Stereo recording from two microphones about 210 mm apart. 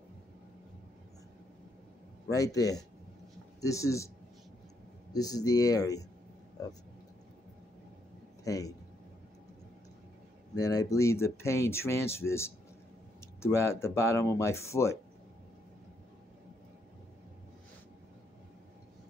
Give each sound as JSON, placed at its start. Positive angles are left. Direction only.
{"t": 2.2, "sound": "speech", "side_deg": 15}
{"t": 5.1, "sound": "speech", "side_deg": 15}
{"t": 8.5, "sound": "speech", "side_deg": 15}
{"t": 10.5, "sound": "speech", "side_deg": 15}